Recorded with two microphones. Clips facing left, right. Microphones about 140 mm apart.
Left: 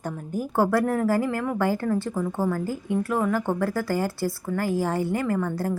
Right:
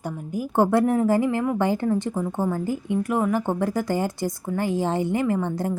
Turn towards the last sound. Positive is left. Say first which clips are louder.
# right 1 dB
turn(degrees=-20)  # may be behind; listen again after turning